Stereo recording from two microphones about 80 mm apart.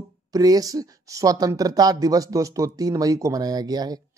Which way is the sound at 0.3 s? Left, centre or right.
Right.